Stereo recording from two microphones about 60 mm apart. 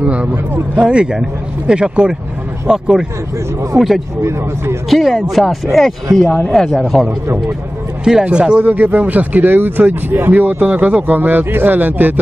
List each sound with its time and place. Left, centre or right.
0.0 s speech: right; by 4.0 s centre
4.2 s speech: right
4.8 s speech: centre
8.0 s speech: centre
8.6 s speech: right